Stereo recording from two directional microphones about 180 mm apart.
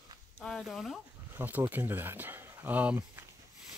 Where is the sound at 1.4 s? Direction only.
10° right (ahead or behind).